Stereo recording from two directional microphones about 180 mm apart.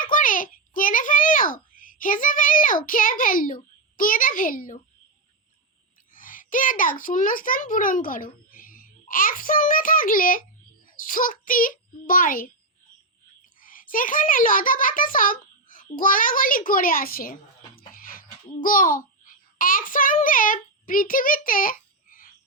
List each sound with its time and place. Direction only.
0.0 s a child's voice: 50° left (ahead or behind)
6.1 s a child's voice: 50° left (ahead or behind)
13.6 s a child's voice: 50° left (ahead or behind)
17.7 s a sound: 50° left (ahead or behind)
18.6 s a child's voice: 50° left (ahead or behind)